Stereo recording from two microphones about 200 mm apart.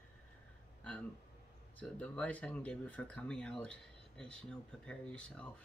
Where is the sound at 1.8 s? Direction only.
5° left (ahead or behind).